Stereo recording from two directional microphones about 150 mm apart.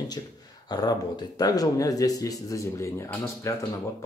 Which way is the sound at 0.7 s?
30° left (ahead or behind).